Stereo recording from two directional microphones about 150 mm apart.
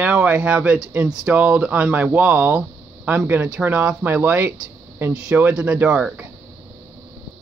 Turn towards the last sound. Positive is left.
turn(degrees=-5)  # may be behind; listen again after turning